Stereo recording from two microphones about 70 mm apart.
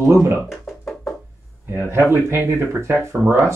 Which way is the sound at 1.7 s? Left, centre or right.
Right.